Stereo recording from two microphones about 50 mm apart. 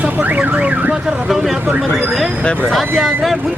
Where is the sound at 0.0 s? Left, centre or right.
Right.